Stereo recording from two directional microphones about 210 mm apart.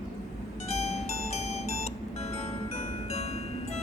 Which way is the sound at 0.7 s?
30° left (ahead or behind).